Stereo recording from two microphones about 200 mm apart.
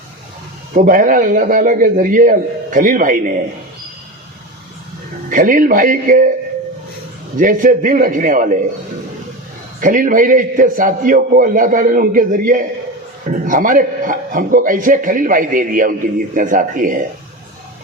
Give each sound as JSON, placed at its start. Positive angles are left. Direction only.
{"t": 0.7, "sound": "a man's voice", "side_deg": -45}
{"t": 5.3, "sound": "a man's voice", "side_deg": -45}
{"t": 7.3, "sound": "a man's voice", "side_deg": -40}
{"t": 9.8, "sound": "a man's voice", "side_deg": -40}